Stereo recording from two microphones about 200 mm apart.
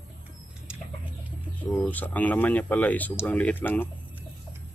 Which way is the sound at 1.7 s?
10° left (ahead or behind).